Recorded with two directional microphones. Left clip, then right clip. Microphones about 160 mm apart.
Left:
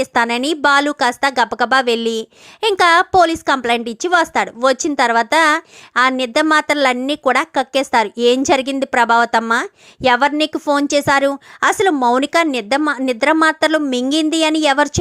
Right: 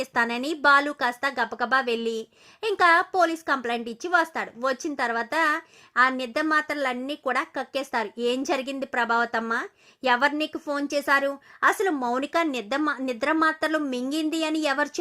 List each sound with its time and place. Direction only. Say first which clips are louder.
0.0 s a woman's voice: left 9 dB; 30° left (ahead or behind)